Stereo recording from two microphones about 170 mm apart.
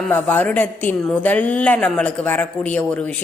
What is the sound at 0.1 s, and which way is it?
A woman's voice, 10° left (ahead or behind).